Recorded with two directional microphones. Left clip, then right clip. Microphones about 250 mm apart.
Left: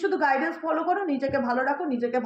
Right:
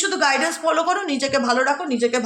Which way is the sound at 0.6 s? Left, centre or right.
Right.